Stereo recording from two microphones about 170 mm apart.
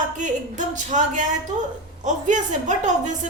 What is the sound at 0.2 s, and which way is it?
A woman's voice, 45° right (ahead or behind).